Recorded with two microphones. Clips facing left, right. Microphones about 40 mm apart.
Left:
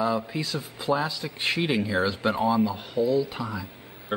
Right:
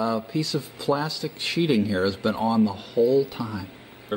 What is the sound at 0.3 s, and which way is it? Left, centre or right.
Speech, centre.